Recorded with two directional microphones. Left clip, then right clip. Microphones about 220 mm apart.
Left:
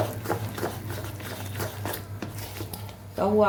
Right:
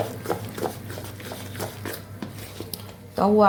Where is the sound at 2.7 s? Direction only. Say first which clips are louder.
Right 4 dB; 30° right (ahead or behind).